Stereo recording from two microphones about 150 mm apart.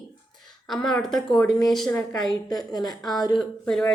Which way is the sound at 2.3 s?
25° left (ahead or behind).